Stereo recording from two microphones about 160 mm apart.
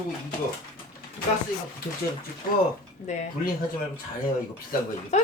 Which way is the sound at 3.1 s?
45° left (ahead or behind).